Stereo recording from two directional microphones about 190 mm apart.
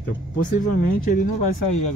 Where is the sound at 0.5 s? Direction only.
45° left (ahead or behind).